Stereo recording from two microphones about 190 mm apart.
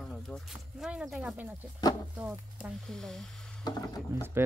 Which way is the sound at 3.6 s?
20° left (ahead or behind).